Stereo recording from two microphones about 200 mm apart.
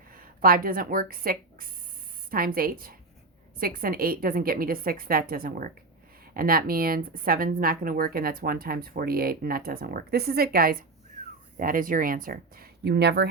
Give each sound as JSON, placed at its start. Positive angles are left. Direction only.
{"t": 0.1, "sound": "speech", "side_deg": -45}